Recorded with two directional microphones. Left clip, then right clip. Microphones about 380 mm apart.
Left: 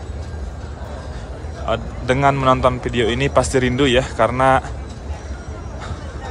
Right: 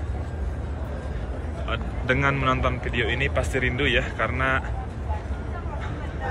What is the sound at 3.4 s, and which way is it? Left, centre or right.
Speech, left.